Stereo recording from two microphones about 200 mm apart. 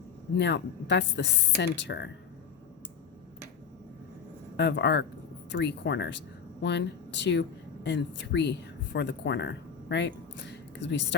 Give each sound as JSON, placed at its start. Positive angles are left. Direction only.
{"t": 0.3, "sound": "a woman's voice", "side_deg": 60}
{"t": 4.5, "sound": "a woman's voice", "side_deg": 60}